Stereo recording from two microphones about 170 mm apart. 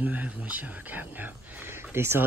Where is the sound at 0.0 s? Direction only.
10° right (ahead or behind).